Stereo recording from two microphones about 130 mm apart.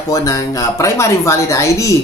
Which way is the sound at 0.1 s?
25° left (ahead or behind).